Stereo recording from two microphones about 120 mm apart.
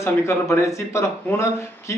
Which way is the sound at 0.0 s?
25° left (ahead or behind).